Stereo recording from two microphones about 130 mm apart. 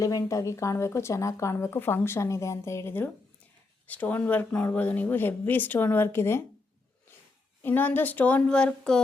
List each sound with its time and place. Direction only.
0.0 s speech: 25° left (ahead or behind)
7.6 s speech: 15° left (ahead or behind)